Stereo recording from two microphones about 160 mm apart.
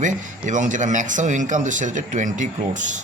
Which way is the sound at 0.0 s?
50° right (ahead or behind).